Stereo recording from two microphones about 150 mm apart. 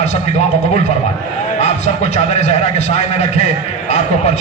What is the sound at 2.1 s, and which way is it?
Speech, 50° left (ahead or behind).